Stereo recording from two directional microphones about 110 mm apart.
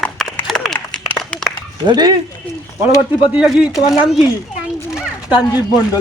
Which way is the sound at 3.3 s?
10° right (ahead or behind).